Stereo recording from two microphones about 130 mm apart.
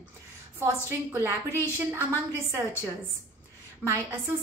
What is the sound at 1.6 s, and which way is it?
Speech, 20° right (ahead or behind).